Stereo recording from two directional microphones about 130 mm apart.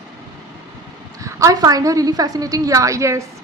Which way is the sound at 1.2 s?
25° right (ahead or behind).